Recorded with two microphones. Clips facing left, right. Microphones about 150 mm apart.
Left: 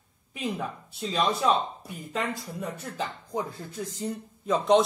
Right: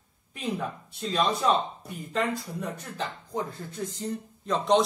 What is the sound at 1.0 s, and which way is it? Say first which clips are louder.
Speech: even; 5° left (ahead or behind).